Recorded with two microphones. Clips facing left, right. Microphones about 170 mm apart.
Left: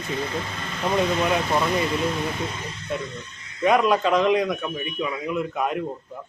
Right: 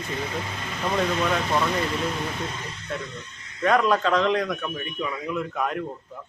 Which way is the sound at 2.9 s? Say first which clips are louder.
Left 4 dB; 10° left (ahead or behind).